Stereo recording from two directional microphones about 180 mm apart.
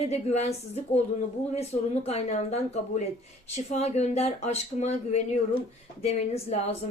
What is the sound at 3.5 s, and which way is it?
Speech, 35° left (ahead or behind).